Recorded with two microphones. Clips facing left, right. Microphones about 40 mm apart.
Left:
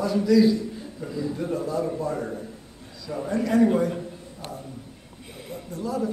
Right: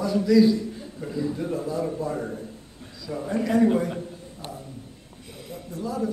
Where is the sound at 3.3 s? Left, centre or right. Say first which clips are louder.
Even; centre.